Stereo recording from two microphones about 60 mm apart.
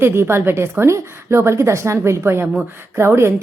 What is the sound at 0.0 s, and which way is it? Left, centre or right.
A woman's voice, right.